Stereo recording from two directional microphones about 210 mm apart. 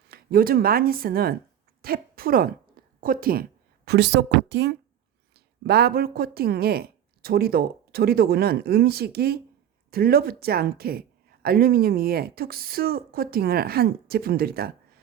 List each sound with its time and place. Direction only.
0.1 s a woman's voice: 45° right (ahead or behind)